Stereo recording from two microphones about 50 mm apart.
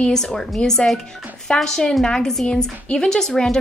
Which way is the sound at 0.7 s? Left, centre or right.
Centre.